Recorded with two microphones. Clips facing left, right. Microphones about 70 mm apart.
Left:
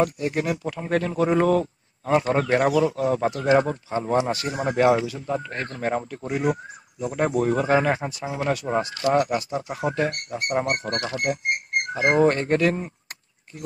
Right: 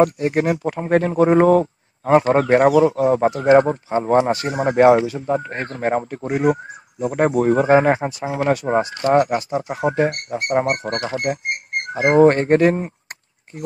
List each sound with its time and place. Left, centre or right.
0.0 s speech: right
10.0 s speech: right
12.2 s speech: right